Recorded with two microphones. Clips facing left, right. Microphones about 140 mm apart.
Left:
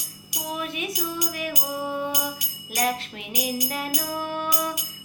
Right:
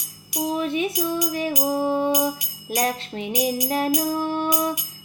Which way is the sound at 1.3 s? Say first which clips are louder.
Right 7 dB; 30° right (ahead or behind).